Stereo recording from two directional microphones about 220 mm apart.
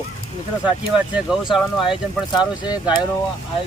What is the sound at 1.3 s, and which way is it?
Speech, centre (ahead or behind).